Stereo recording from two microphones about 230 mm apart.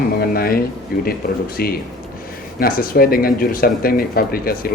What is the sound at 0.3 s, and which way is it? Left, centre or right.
Speech, left.